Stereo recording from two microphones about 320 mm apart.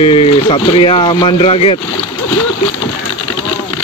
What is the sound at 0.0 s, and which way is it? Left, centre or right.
Speech, centre.